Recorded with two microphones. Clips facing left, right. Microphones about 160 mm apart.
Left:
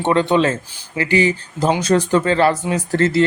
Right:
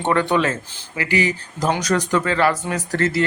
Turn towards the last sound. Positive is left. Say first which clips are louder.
# left 4 dB
turn(degrees=25)  # may be behind; listen again after turning